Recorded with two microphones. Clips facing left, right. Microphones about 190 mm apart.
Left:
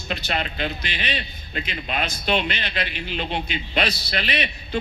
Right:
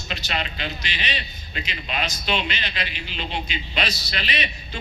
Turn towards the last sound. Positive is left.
turn(degrees=55)  # may be behind; listen again after turning